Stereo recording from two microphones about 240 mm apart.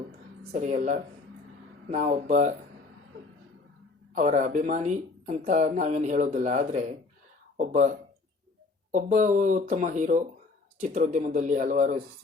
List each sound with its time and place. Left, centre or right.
0.5 s speech: right
4.1 s speech: right
8.9 s speech: right